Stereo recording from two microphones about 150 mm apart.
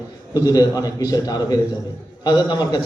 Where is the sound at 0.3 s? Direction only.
25° left (ahead or behind).